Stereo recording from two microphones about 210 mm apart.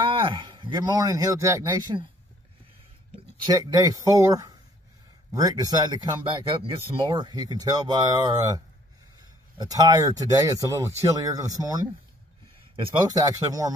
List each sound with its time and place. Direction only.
0.2 s speech: 20° right (ahead or behind)
3.4 s speech: 15° right (ahead or behind)